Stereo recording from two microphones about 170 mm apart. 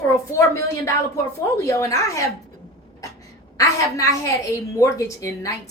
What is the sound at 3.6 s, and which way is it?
Speech, 20° left (ahead or behind).